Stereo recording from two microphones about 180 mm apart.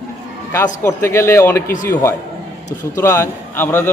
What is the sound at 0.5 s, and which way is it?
A man's voice, 15° left (ahead or behind).